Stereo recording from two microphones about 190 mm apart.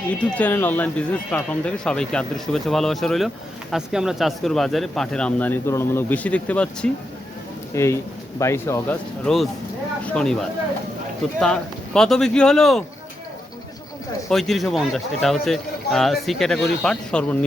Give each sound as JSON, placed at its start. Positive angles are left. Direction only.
{"t": 0.2, "sound": "speech", "side_deg": 10}
{"t": 11.3, "sound": "speech", "side_deg": 5}
{"t": 14.3, "sound": "speech", "side_deg": 0}